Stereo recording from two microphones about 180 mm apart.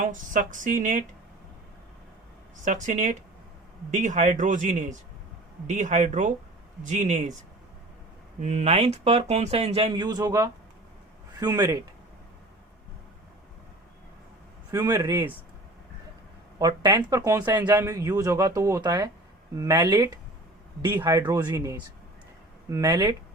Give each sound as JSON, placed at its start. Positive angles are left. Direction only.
{"t": 0.0, "sound": "speech", "side_deg": -45}
{"t": 2.6, "sound": "speech", "side_deg": -45}
{"t": 8.4, "sound": "speech", "side_deg": -40}
{"t": 14.7, "sound": "speech", "side_deg": -20}
{"t": 16.6, "sound": "speech", "side_deg": -20}